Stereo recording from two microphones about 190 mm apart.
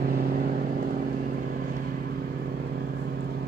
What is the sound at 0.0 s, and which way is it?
Vehicle, 50° right (ahead or behind).